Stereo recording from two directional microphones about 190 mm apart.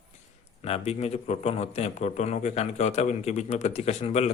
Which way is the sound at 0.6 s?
35° left (ahead or behind).